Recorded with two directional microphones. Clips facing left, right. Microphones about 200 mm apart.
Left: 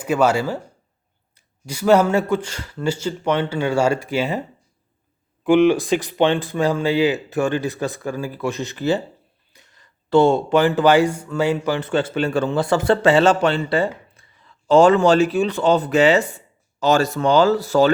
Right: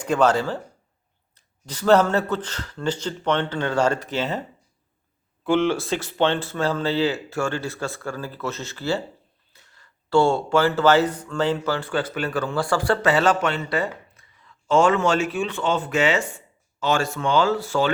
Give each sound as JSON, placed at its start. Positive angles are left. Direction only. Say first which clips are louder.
{"t": 0.0, "sound": "speech", "louder": "left 2 dB", "side_deg": 10}